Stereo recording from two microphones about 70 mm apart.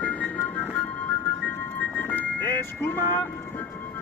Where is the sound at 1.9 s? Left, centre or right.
Left.